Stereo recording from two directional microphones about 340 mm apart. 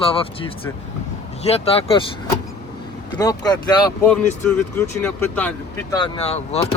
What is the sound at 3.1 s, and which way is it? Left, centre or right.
Speech, centre.